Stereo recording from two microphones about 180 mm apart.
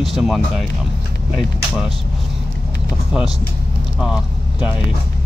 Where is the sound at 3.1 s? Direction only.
Centre (ahead or behind).